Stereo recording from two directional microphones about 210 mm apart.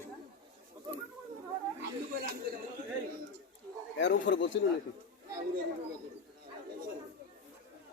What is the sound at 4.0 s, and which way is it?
Speech, 60° left (ahead or behind).